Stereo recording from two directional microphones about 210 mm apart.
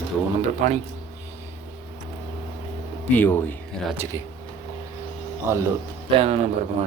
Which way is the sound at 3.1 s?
10° left (ahead or behind).